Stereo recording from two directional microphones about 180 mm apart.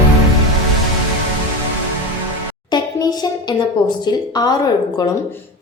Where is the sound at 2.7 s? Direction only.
25° left (ahead or behind).